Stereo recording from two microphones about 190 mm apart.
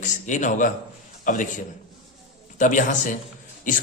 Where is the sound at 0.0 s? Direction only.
40° left (ahead or behind).